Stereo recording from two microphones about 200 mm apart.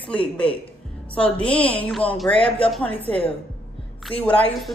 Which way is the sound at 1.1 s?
5° left (ahead or behind).